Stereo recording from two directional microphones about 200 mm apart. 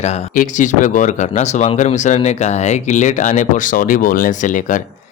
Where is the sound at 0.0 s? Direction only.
40° left (ahead or behind).